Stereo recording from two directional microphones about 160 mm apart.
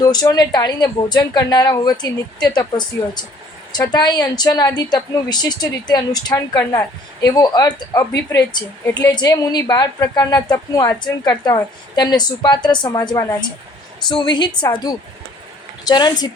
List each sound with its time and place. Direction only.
0.0 s a woman's voice: 25° left (ahead or behind)